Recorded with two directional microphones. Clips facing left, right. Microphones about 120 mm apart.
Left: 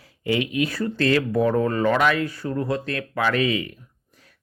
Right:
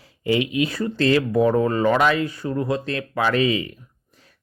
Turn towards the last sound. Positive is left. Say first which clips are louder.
# right 2 dB
turn(degrees=-25)  # may be behind; listen again after turning